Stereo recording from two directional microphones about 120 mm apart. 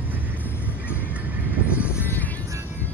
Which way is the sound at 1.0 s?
15° right (ahead or behind).